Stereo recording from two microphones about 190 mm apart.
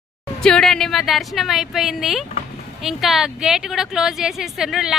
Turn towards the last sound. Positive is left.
turn(degrees=0)  # may be behind; listen again after turning